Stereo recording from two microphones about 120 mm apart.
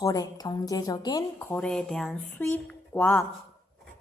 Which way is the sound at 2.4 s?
15° left (ahead or behind).